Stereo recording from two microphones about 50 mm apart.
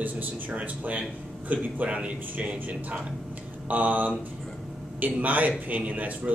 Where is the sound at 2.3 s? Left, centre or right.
Right.